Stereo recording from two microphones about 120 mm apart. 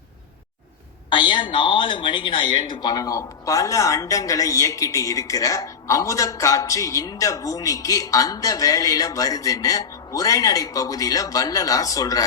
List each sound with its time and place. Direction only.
1.1 s speech: 40° left (ahead or behind)